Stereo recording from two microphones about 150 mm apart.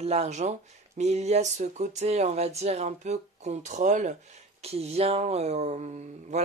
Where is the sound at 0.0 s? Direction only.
45° right (ahead or behind).